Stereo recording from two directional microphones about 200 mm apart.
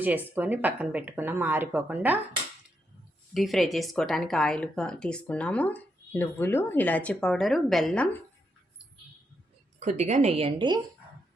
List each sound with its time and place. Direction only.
0.3 s speech: 10° right (ahead or behind)
3.3 s speech: centre (ahead or behind)
9.8 s a woman's voice: 35° right (ahead or behind)